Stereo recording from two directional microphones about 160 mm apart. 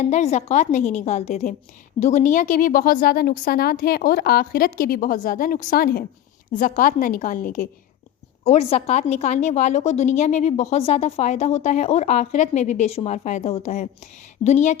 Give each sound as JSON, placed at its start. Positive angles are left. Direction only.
{"t": 0.0, "sound": "a woman's voice", "side_deg": 45}
{"t": 6.5, "sound": "speech", "side_deg": 55}
{"t": 8.4, "sound": "a woman's voice", "side_deg": 40}